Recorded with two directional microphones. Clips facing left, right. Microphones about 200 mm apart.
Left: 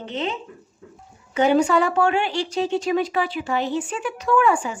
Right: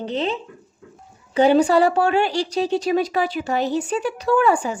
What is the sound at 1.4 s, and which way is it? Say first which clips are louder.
Speech: right 3 dB; 35° right (ahead or behind).